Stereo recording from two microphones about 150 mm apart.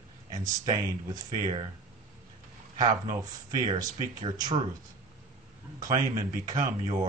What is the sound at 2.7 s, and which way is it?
Speech, 25° right (ahead or behind).